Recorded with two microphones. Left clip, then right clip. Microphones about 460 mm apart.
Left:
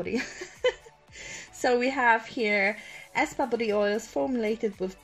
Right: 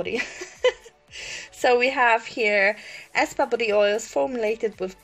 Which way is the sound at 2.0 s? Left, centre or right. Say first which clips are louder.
Right 4 dB; right.